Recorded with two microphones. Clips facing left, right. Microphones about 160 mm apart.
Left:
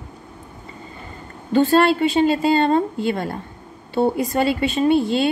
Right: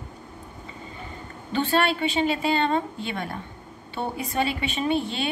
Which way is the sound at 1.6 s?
40° left (ahead or behind).